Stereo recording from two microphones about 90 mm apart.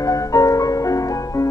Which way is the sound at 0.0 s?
40° left (ahead or behind).